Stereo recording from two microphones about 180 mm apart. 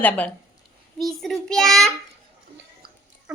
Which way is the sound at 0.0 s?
10° left (ahead or behind).